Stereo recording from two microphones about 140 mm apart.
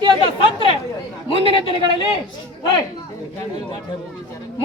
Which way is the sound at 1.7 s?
35° right (ahead or behind).